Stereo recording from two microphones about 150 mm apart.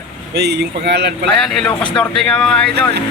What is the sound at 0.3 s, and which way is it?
Speech, 90° right.